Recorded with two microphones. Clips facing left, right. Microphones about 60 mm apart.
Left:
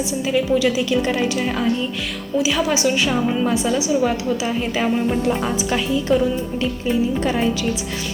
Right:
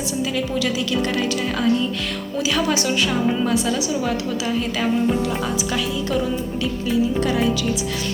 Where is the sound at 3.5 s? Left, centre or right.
Left.